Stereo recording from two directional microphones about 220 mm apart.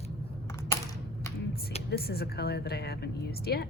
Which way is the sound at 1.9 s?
45° left (ahead or behind).